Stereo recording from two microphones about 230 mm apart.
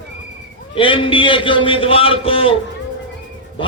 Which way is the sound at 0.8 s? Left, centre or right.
Left.